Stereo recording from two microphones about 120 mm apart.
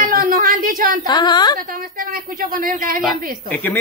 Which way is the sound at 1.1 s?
35° left (ahead or behind).